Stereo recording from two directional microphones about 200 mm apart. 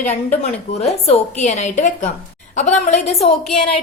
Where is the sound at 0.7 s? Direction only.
30° left (ahead or behind).